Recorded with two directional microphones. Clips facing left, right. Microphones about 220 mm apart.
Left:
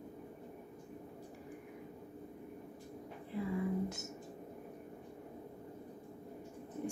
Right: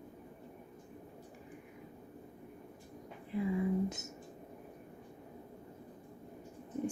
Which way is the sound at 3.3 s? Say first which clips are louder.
Right 4 dB; 15° right (ahead or behind).